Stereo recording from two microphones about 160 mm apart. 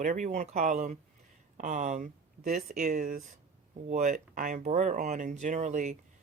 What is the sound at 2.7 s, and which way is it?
Speech, 55° right (ahead or behind).